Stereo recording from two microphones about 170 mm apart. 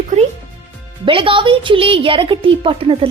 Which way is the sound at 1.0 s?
30° right (ahead or behind).